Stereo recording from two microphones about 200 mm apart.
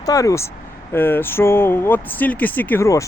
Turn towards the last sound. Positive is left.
turn(degrees=15)  # may be behind; listen again after turning